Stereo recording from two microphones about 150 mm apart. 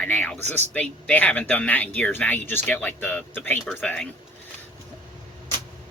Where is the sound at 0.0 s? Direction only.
10° left (ahead or behind).